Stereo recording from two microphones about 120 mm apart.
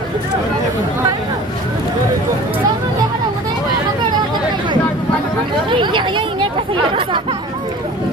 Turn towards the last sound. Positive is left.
turn(degrees=-40)  # may be behind; listen again after turning